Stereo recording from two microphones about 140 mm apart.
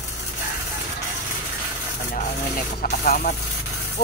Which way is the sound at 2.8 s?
80° left.